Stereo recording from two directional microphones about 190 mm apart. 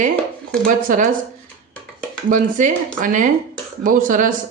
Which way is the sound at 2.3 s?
40° right (ahead or behind).